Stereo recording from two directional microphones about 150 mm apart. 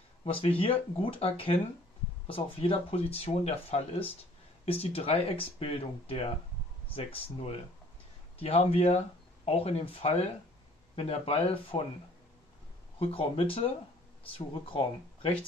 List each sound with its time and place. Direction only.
0.2 s speech: 40° left (ahead or behind)
13.0 s speech: 40° left (ahead or behind)